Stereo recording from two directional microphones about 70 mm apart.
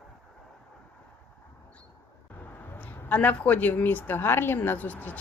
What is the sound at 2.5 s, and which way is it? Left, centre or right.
Speech, left.